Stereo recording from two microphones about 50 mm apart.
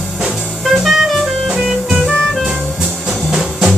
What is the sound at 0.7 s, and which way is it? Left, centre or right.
Music, centre.